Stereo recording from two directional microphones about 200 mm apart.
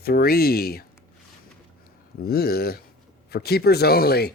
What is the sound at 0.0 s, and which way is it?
Speech, 50° left (ahead or behind).